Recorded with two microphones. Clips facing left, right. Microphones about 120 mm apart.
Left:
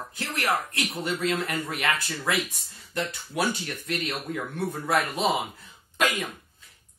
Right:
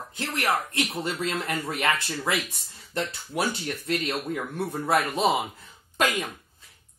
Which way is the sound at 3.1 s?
30° right (ahead or behind).